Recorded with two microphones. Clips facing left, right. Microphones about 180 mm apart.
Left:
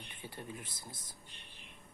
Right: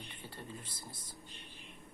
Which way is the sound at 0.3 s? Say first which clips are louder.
Left 2 dB; 15° left (ahead or behind).